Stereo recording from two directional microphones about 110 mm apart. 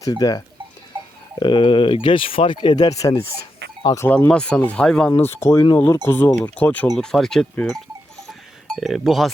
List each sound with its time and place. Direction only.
0.0 s speech: 35° left (ahead or behind)
1.4 s speech: 45° left (ahead or behind)
3.0 s speech: 25° left (ahead or behind)
4.1 s speech: 10° left (ahead or behind)
5.2 s speech: 20° left (ahead or behind)
6.9 s speech: 5° left (ahead or behind)
8.3 s a sound: centre (ahead or behind)